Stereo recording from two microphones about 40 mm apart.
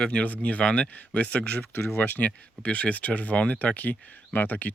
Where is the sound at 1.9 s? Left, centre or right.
Left.